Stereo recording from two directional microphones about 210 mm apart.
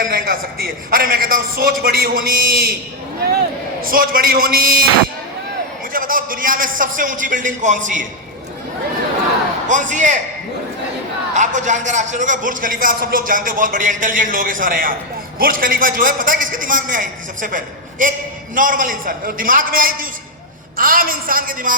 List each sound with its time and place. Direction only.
0.0 s a man's voice: 40° right (ahead or behind)
3.8 s a man's voice: 45° right (ahead or behind)
5.9 s a man's voice: 40° right (ahead or behind)
9.6 s a man's voice: 35° right (ahead or behind)
11.3 s a man's voice: 35° right (ahead or behind)